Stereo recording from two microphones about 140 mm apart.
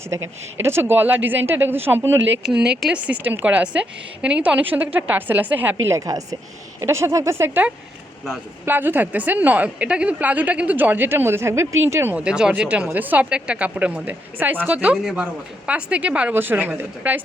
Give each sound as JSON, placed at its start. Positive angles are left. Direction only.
{"t": 0.6, "sound": "a woman's voice", "side_deg": -15}
{"t": 2.5, "sound": "a woman's voice", "side_deg": -5}